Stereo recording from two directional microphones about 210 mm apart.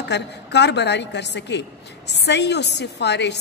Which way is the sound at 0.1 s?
55° left (ahead or behind).